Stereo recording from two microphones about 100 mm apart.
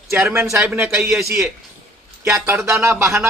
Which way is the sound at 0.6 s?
25° right (ahead or behind).